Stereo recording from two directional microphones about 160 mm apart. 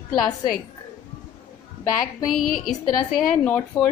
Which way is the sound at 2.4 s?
60° left (ahead or behind).